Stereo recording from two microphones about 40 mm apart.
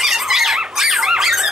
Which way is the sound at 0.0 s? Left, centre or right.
Centre.